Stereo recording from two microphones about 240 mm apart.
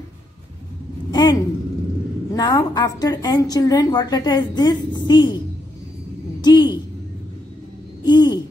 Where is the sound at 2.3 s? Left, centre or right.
Centre.